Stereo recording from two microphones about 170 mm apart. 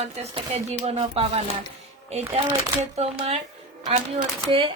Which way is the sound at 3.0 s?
35° right (ahead or behind).